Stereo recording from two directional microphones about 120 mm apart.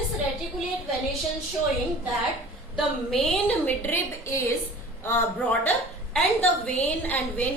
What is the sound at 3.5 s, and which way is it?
Speech, 15° left (ahead or behind).